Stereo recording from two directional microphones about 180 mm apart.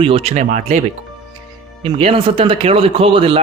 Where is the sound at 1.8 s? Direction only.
30° right (ahead or behind).